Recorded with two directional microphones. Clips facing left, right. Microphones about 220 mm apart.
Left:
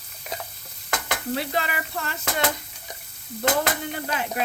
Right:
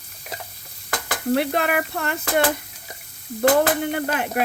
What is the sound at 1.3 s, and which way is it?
Speech, 60° right (ahead or behind).